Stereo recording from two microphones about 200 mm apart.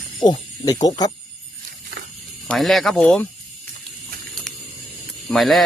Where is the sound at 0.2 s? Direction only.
20° left (ahead or behind).